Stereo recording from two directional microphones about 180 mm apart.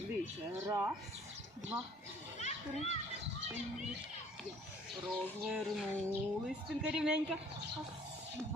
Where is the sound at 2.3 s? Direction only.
40° left (ahead or behind).